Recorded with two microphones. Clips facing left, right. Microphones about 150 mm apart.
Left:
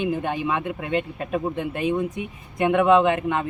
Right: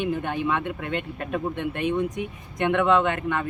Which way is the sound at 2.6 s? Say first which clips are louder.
Left 4 dB; 15° left (ahead or behind).